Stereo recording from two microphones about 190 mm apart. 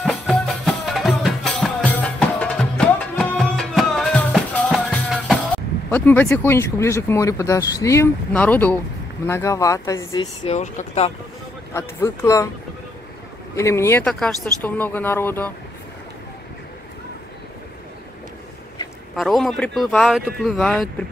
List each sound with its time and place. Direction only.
0.0 s music: centre (ahead or behind)
5.9 s speech: 10° left (ahead or behind)
10.5 s speech: 35° left (ahead or behind)
11.7 s speech: 15° left (ahead or behind)
13.6 s speech: 15° left (ahead or behind)
19.1 s speech: centre (ahead or behind)